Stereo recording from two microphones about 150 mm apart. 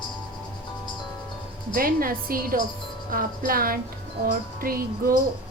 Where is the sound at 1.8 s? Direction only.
70° right (ahead or behind).